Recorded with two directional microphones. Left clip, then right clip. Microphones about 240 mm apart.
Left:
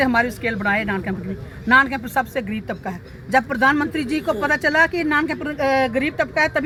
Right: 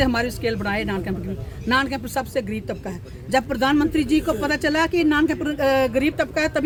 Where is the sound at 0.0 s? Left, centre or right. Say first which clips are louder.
Left 3 dB; centre.